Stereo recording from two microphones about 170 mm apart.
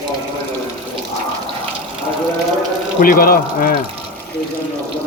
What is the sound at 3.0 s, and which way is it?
Speech, 55° left (ahead or behind).